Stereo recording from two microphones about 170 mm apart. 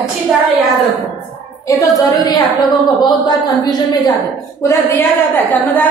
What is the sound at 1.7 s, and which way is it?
A woman's voice, 20° left (ahead or behind).